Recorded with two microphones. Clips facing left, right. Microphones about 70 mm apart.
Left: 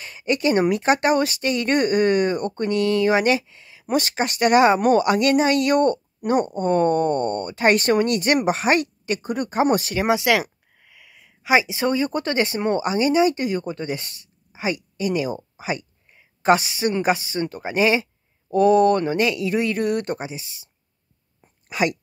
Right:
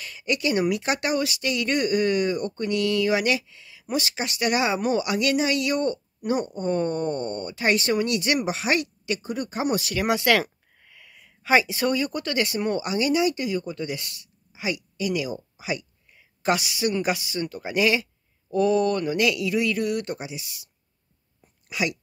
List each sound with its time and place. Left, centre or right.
0.0 s speech: left
9.9 s speech: centre
21.6 s speech: left